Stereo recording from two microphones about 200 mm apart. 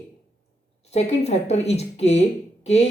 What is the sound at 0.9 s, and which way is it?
Speech, 30° left (ahead or behind).